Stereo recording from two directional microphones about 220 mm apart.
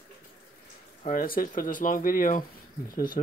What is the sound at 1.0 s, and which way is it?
Speech, 40° left (ahead or behind).